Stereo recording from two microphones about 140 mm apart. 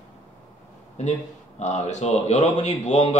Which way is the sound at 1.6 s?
55° left (ahead or behind).